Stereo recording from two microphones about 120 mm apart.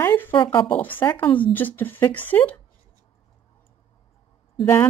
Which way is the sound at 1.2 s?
45° left (ahead or behind).